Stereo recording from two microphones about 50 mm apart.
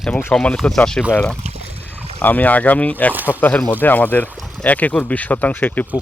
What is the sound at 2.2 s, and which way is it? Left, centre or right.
Speech, left.